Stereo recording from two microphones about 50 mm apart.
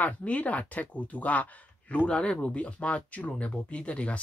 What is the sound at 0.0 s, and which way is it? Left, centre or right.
Speech, left.